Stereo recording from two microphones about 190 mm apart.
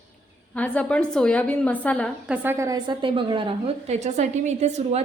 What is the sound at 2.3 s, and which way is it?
A woman's voice, 15° right (ahead or behind).